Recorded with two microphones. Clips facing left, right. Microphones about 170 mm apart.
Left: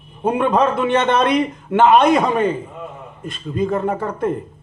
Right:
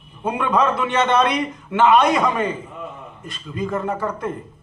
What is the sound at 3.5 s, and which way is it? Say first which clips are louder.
Speech: left 4 dB; 30° left (ahead or behind).